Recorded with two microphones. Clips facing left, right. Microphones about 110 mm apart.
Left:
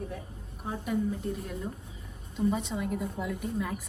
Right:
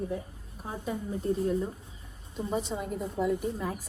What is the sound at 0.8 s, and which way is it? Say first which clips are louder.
Speech: left 1 dB; 30° right (ahead or behind).